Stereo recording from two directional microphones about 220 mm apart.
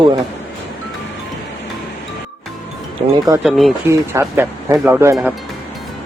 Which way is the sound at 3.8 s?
10° right (ahead or behind).